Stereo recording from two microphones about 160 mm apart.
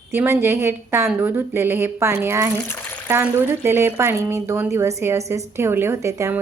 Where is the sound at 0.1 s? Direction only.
15° right (ahead or behind).